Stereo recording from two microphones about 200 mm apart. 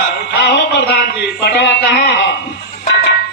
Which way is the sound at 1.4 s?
55° left (ahead or behind).